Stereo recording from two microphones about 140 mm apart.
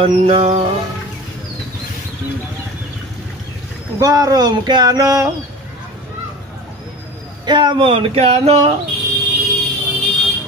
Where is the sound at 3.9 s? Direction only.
25° right (ahead or behind).